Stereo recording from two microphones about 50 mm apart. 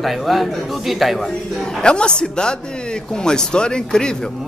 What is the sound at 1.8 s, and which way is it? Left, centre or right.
Speech, centre.